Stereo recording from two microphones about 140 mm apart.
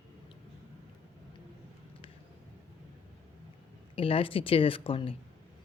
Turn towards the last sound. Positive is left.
turn(degrees=40)  # may be behind; listen again after turning